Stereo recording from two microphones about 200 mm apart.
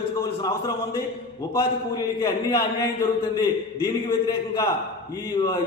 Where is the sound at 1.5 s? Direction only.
20° left (ahead or behind).